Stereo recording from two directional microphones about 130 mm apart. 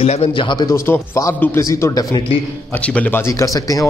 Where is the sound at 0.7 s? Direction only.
20° left (ahead or behind).